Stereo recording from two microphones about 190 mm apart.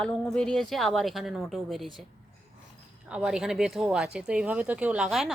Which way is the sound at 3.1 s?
5° right (ahead or behind).